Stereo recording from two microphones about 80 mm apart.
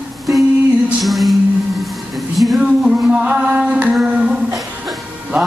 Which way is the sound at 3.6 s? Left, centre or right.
Centre.